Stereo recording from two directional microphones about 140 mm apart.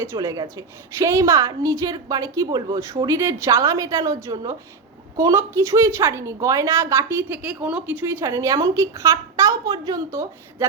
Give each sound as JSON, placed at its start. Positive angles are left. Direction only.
{"t": 0.0, "sound": "a woman's voice", "side_deg": -20}